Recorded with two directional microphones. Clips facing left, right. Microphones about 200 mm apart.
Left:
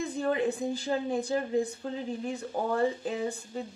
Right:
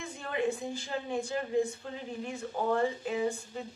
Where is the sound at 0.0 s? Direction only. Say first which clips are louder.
Left 4 dB; 35° left (ahead or behind).